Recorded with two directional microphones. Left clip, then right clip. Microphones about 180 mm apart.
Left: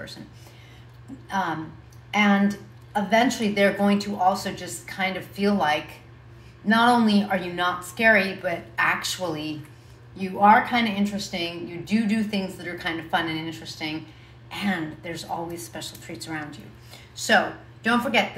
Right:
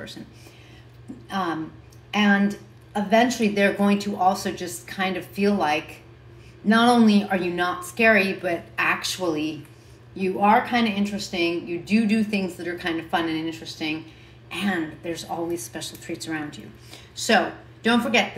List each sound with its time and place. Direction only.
1.3 s a woman's voice: 10° left (ahead or behind)